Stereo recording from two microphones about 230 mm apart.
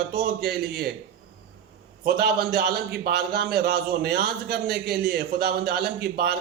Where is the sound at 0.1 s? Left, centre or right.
Right.